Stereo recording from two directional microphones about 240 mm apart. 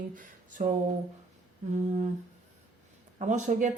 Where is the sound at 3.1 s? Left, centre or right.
Right.